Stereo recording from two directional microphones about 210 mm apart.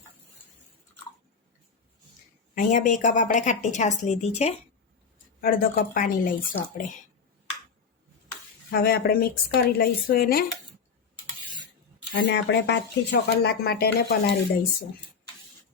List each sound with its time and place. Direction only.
2.6 s a woman's voice: 40° left (ahead or behind)
5.4 s speech: 45° left (ahead or behind)
8.7 s speech: 50° left (ahead or behind)
12.1 s speech: 55° left (ahead or behind)